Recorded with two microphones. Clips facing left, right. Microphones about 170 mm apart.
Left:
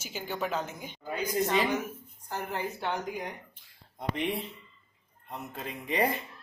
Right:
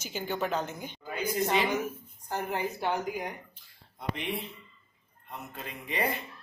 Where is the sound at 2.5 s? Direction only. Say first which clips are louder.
Right 2 dB; 10° right (ahead or behind).